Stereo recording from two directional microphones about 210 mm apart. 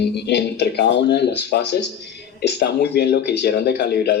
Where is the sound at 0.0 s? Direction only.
50° left (ahead or behind).